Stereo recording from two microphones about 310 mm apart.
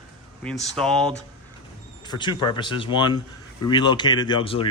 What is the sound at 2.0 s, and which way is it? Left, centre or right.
Speech, centre.